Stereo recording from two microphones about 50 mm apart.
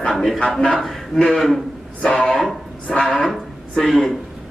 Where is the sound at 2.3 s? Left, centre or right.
Centre.